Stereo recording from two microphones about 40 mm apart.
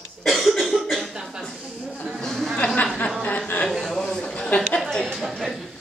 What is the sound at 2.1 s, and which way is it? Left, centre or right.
Speech, centre.